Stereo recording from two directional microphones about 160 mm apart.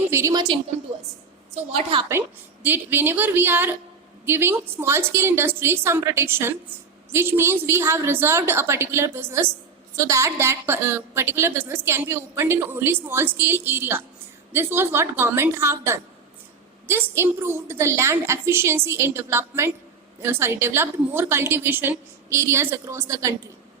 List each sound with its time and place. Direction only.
0.1 s a woman's voice: 20° right (ahead or behind)
1.7 s a woman's voice: 35° right (ahead or behind)
2.6 s a woman's voice: 10° right (ahead or behind)